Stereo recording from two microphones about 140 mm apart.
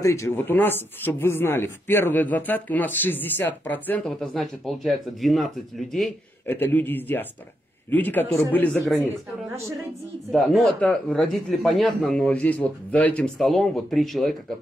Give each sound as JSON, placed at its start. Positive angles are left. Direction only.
{"t": 0.0, "sound": "speech", "side_deg": 20}
{"t": 6.4, "sound": "speech", "side_deg": 15}
{"t": 10.3, "sound": "speech", "side_deg": 0}